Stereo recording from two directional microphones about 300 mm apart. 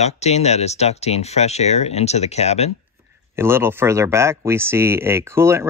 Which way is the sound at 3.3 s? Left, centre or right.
Centre.